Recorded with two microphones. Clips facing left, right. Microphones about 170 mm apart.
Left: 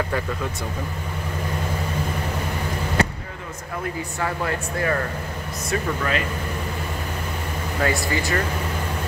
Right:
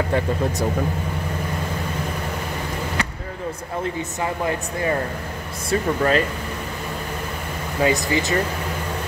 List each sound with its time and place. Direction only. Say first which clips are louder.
0.1 s speech: right 5 dB; 35° right (ahead or behind)
4.2 s speech: right 1 dB; 20° right (ahead or behind)
5.7 s speech: right 5 dB; 40° right (ahead or behind)
7.8 s speech: right 4 dB; 20° right (ahead or behind)